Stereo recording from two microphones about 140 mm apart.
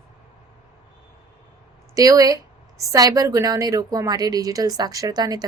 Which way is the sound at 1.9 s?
25° right (ahead or behind).